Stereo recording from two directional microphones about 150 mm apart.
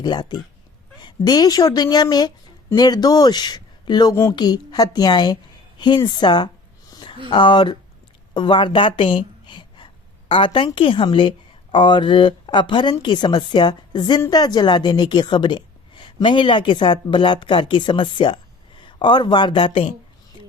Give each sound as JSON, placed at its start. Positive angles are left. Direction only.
{"t": 0.0, "sound": "speech", "side_deg": 30}
{"t": 4.1, "sound": "speech", "side_deg": 15}
{"t": 4.4, "sound": "speech", "side_deg": 25}
{"t": 6.9, "sound": "a sound", "side_deg": 30}
{"t": 7.3, "sound": "a woman's voice", "side_deg": 30}
{"t": 8.3, "sound": "a sound", "side_deg": 30}
{"t": 10.8, "sound": "a woman's voice", "side_deg": 35}